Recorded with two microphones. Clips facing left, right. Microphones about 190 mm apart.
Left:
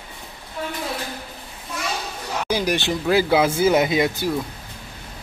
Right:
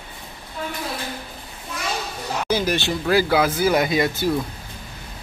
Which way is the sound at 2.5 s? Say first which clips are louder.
Even; 15° left (ahead or behind).